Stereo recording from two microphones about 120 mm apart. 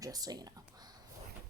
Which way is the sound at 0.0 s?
30° right (ahead or behind).